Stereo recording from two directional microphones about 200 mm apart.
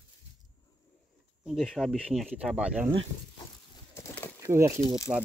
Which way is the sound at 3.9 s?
10° left (ahead or behind).